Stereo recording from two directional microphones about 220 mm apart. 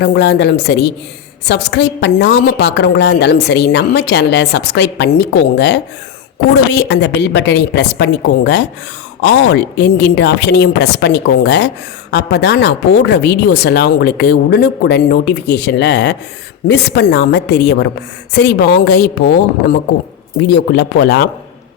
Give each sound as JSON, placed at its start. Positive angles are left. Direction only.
{"t": 0.0, "sound": "a woman's voice", "side_deg": 50}
{"t": 20.5, "sound": "a woman's voice", "side_deg": 50}